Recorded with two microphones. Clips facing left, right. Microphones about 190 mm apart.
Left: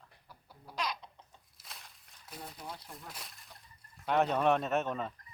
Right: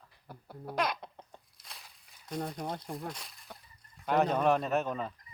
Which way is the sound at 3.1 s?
Centre (ahead or behind).